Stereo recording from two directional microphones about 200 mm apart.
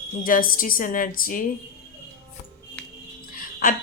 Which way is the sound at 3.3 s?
45° left (ahead or behind).